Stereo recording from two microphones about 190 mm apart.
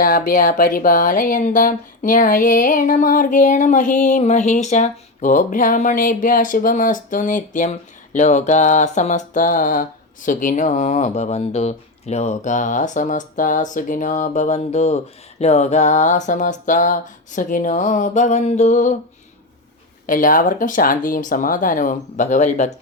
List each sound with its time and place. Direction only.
0.0 s speech: 45° left (ahead or behind)
20.1 s speech: 45° left (ahead or behind)